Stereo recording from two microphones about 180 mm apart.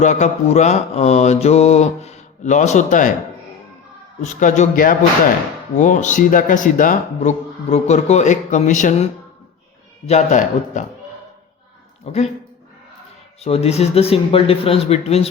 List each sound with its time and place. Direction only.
0.0 s mantra: 40° left (ahead or behind)
4.2 s speech: 45° left (ahead or behind)
10.1 s speech: 40° left (ahead or behind)
12.1 s mantra: 35° left (ahead or behind)
13.4 s mantra: 35° left (ahead or behind)